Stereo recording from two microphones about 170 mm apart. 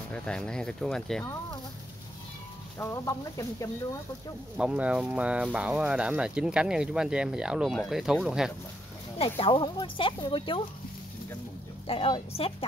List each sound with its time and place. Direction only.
0.1 s speech: 5° left (ahead or behind)
2.8 s speech: 15° left (ahead or behind)
4.6 s speech: 5° right (ahead or behind)
9.2 s speech: 35° left (ahead or behind)
11.9 s speech: 35° left (ahead or behind)